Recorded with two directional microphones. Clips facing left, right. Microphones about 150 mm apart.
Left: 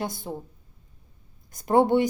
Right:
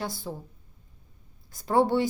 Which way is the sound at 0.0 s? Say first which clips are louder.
Left 2 dB; 20° left (ahead or behind).